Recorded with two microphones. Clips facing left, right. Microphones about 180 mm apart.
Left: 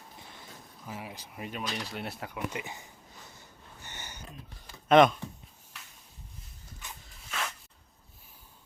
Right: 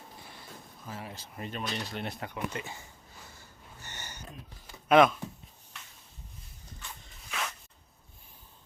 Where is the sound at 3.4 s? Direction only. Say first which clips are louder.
Even; 15° left (ahead or behind).